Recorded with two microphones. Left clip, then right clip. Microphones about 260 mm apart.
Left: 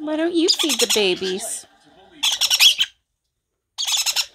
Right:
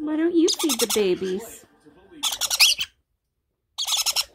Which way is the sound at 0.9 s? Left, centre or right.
Centre.